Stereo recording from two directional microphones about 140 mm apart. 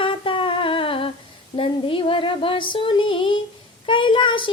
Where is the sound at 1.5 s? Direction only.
40° left (ahead or behind).